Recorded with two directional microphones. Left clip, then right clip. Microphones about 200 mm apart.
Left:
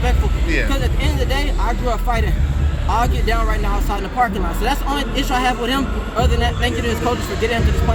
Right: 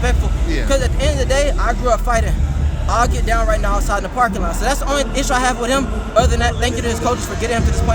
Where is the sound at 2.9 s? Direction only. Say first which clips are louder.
Right 3 dB; 20° right (ahead or behind).